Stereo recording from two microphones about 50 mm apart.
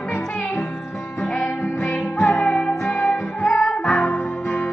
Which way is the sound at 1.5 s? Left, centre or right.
Left.